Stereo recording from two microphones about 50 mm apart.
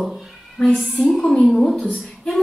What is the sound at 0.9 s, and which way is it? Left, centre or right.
Speech, centre.